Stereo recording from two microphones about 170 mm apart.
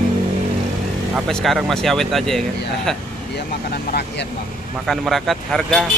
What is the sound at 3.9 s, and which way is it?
Speech, 70° left (ahead or behind).